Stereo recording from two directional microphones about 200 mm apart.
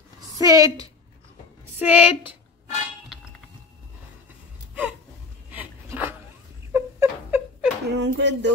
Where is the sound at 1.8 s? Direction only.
5° right (ahead or behind).